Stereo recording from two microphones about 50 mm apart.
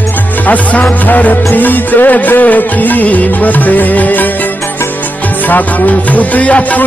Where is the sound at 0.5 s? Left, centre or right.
Left.